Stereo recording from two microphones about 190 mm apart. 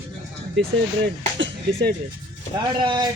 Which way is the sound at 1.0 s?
70° right (ahead or behind).